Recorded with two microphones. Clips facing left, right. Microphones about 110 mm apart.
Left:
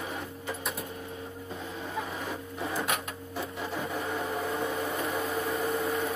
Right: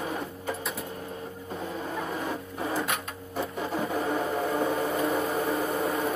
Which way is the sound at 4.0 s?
40° right (ahead or behind).